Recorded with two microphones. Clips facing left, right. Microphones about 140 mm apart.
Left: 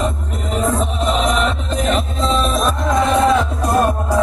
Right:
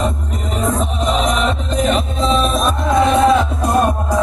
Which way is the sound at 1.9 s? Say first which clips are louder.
Right 1 dB; centre (ahead or behind).